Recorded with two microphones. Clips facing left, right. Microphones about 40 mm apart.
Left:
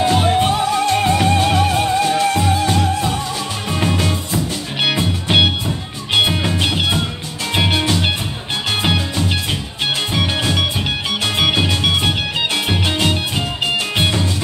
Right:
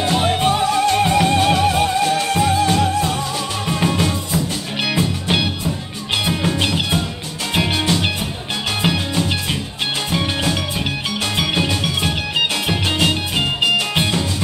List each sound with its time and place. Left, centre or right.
0.1 s music: centre
4.7 s music: centre
7.5 s music: centre
10.1 s music: centre
11.2 s music: centre
12.6 s music: centre